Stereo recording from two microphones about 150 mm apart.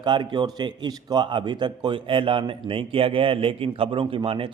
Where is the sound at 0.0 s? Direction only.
30° right (ahead or behind).